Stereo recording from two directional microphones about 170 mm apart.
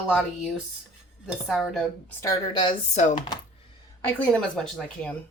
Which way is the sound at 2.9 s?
45° left (ahead or behind).